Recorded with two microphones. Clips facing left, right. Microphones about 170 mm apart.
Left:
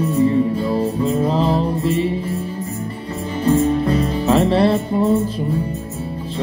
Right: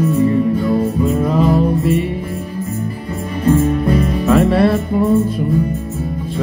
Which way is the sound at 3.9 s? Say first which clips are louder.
Right 3 dB; 30° left (ahead or behind).